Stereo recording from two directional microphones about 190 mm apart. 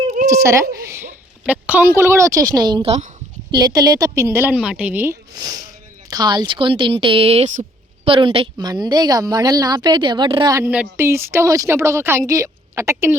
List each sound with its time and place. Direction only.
0.3 s a woman's voice: 15° right (ahead or behind)
6.1 s a woman's voice: 20° right (ahead or behind)